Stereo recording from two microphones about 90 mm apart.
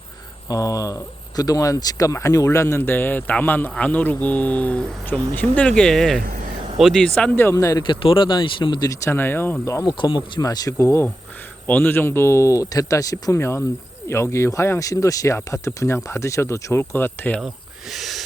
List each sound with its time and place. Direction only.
0.4 s speech: 40° left (ahead or behind); by 7.1 s 5° left (ahead or behind)
7.5 s speech: 40° left (ahead or behind)
7.8 s speech: 65° left (ahead or behind)
9.0 s speech: 25° left (ahead or behind)
9.8 s speech: 60° left (ahead or behind)
10.4 s speech: 45° left (ahead or behind); by 17.4 s 20° left (ahead or behind)
17.4 s speech: 5° right (ahead or behind)